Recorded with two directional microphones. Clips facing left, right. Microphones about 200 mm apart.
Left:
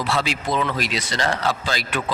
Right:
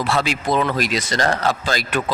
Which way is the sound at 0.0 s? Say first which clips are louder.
Right 3 dB; 50° right (ahead or behind).